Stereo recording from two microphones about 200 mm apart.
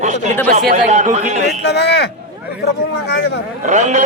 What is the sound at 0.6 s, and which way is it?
Speech, 35° right (ahead or behind).